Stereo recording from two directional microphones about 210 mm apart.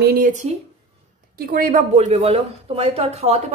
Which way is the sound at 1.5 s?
45° right (ahead or behind).